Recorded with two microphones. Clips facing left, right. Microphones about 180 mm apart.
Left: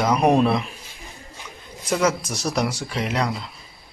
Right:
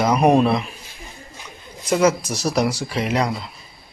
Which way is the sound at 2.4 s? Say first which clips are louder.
Right 3 dB; 5° right (ahead or behind).